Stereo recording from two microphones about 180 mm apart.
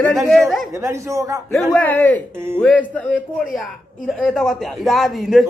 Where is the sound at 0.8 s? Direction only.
15° right (ahead or behind).